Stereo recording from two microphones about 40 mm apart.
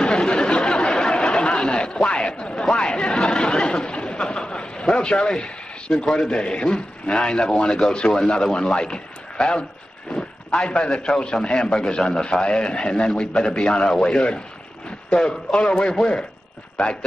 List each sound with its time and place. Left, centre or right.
0.0 s chatter: centre
8.5 s a man's voice: centre